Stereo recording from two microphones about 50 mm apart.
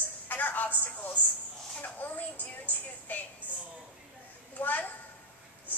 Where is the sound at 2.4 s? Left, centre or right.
Left.